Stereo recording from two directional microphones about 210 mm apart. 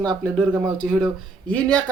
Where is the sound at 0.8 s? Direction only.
Centre (ahead or behind).